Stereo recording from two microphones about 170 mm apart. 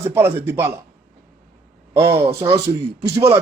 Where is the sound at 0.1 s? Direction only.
15° right (ahead or behind).